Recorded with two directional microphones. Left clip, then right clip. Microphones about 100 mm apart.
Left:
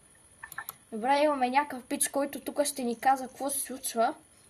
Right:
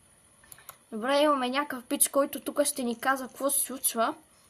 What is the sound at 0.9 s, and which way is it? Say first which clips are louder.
Speech: right 1 dB; 55° right (ahead or behind).